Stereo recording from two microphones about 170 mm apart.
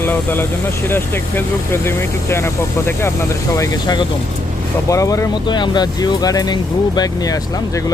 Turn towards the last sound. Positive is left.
turn(degrees=20)  # may be behind; listen again after turning